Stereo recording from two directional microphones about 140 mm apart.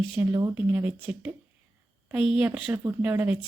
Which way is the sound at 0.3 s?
25° right (ahead or behind).